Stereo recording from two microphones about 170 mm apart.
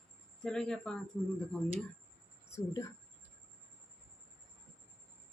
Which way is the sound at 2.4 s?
15° left (ahead or behind).